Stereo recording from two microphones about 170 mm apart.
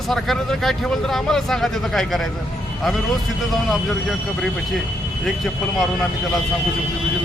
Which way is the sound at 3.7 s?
Centre (ahead or behind).